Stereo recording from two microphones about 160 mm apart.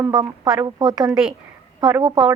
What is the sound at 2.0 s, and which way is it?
Speech, 30° right (ahead or behind).